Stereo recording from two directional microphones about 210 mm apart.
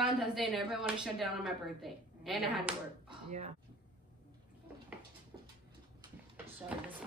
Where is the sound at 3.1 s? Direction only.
30° right (ahead or behind).